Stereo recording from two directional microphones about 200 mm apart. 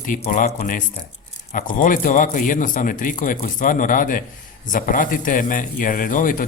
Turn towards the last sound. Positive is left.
turn(degrees=40)  # may be behind; listen again after turning